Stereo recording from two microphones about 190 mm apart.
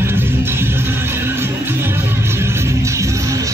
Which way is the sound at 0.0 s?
10° right (ahead or behind).